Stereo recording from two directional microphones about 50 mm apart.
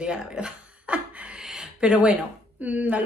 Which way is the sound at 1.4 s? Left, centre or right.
Centre.